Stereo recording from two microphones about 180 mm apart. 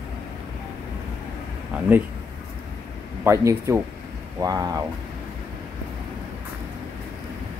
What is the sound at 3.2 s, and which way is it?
Speech, 15° right (ahead or behind).